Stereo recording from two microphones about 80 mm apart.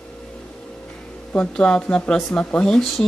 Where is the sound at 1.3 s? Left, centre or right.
Centre.